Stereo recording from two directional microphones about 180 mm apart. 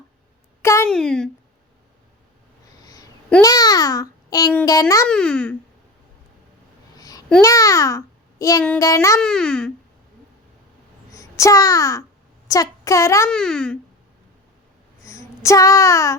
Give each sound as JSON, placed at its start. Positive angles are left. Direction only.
{"t": 0.6, "sound": "a sound", "side_deg": 15}
{"t": 0.9, "sound": "a child's voice", "side_deg": 5}
{"t": 3.4, "sound": "a child's voice", "side_deg": 20}
{"t": 5.0, "sound": "a child's voice", "side_deg": 5}
{"t": 6.9, "sound": "babbling", "side_deg": 20}
{"t": 7.4, "sound": "a child's voice", "side_deg": 20}
{"t": 9.2, "sound": "a child's voice", "side_deg": 5}
{"t": 11.1, "sound": "a child's voice", "side_deg": 20}
{"t": 13.3, "sound": "a child's voice", "side_deg": 5}
{"t": 15.0, "sound": "speech", "side_deg": 20}